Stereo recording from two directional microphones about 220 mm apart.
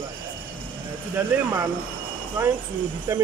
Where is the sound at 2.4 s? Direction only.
10° right (ahead or behind).